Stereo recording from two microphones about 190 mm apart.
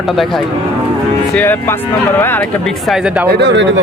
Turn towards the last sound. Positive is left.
turn(degrees=-65)  # may be behind; listen again after turning